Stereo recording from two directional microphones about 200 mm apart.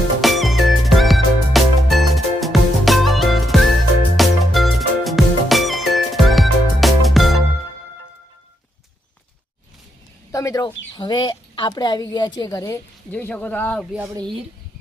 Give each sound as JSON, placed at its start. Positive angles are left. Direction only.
{"t": 0.2, "sound": "music", "side_deg": 0}
{"t": 10.3, "sound": "a woman's voice", "side_deg": 15}
{"t": 14.1, "sound": "speech", "side_deg": -20}